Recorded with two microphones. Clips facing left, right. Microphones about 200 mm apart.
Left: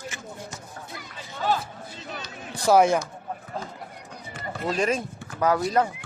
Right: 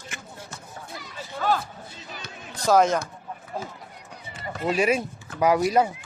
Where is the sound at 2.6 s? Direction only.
10° left (ahead or behind).